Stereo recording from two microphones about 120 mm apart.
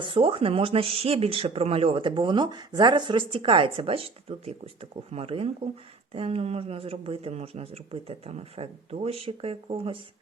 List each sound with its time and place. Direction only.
0.0 s speech: 45° right (ahead or behind)